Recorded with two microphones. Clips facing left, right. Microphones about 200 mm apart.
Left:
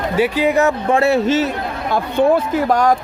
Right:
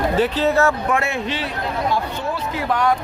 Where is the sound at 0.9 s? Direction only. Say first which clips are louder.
Left 8 dB; 35° left (ahead or behind).